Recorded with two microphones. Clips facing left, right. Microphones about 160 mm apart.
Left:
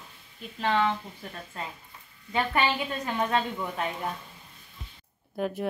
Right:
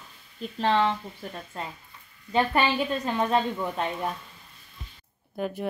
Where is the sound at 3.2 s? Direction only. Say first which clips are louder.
Right 2 dB; 20° right (ahead or behind).